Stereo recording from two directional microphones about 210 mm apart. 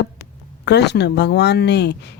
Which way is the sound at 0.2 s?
55° left (ahead or behind).